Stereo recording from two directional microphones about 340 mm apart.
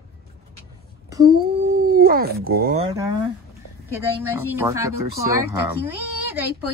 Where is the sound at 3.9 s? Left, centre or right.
Centre.